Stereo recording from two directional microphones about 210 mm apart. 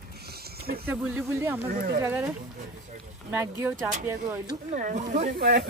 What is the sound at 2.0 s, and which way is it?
Speech, 15° right (ahead or behind).